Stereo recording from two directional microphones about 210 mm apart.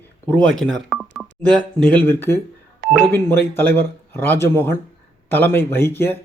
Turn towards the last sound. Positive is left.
turn(degrees=10)  # may be behind; listen again after turning